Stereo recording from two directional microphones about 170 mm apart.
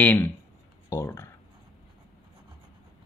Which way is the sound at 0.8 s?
15° left (ahead or behind).